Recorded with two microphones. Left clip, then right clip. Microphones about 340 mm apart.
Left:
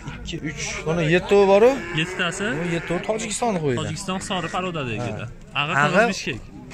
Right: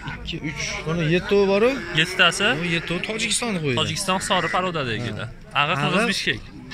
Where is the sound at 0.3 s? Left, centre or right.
Left.